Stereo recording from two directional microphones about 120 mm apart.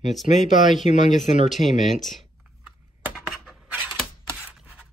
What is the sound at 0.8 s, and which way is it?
Speech, 90° left.